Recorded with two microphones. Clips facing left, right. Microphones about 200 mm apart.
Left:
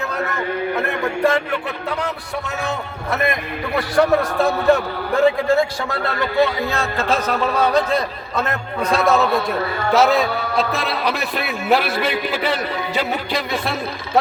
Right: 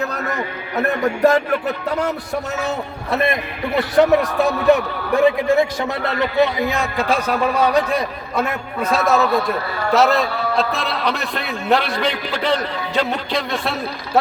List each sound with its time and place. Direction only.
1.2 s music: 40° right (ahead or behind)
3.8 s a man's voice: 20° right (ahead or behind); by 14.2 s centre (ahead or behind)